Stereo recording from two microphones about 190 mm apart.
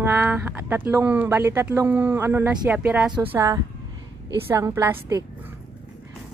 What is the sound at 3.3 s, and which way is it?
A woman's voice, 20° right (ahead or behind).